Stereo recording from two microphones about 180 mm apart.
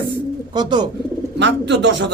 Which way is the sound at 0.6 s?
25° right (ahead or behind).